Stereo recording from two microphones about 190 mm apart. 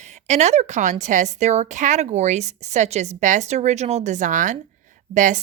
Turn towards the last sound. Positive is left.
turn(degrees=-40)  # may be behind; listen again after turning